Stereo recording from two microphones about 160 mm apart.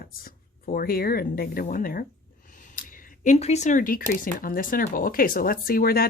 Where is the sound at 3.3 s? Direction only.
45° left (ahead or behind); by 6.1 s 70° left (ahead or behind).